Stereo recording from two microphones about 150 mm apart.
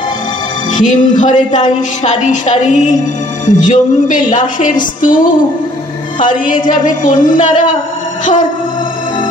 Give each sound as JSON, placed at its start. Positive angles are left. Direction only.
{"t": 0.7, "sound": "a woman's voice", "side_deg": 55}